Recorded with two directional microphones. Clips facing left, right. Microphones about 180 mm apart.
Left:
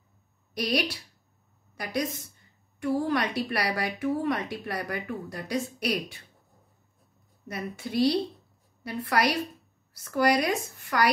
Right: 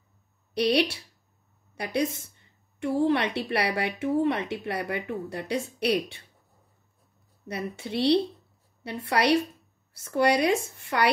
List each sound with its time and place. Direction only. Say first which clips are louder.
0.6 s a woman's voice: right 5 dB; 25° right (ahead or behind)
7.4 s a woman's voice: right 2 dB; 30° right (ahead or behind)